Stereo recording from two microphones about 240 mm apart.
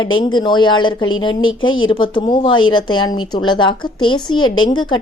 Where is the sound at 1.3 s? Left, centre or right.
Left.